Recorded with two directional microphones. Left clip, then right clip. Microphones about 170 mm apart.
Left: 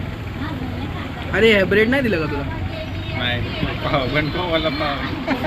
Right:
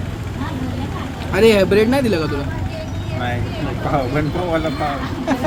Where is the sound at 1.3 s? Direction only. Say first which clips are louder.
Right 2 dB; 20° right (ahead or behind).